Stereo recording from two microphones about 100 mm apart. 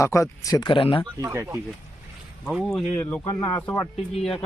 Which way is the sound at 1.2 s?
30° right (ahead or behind).